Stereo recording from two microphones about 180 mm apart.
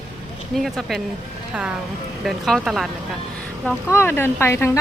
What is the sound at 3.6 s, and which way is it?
Speech, 10° left (ahead or behind).